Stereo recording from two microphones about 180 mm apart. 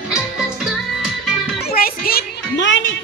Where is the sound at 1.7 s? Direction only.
55° left (ahead or behind); by 3.0 s 85° left.